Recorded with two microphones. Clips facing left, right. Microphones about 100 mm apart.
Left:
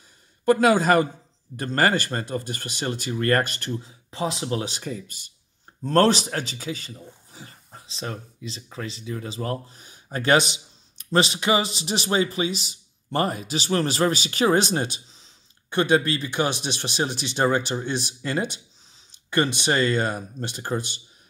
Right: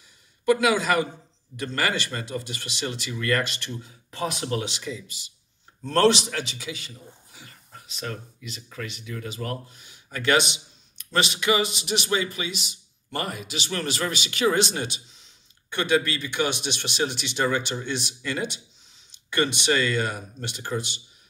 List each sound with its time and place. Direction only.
0.5 s speech: 45° left (ahead or behind)
3.8 s speech: 25° left (ahead or behind)
4.6 s speech: 45° left (ahead or behind)
5.9 s speech: 40° left (ahead or behind)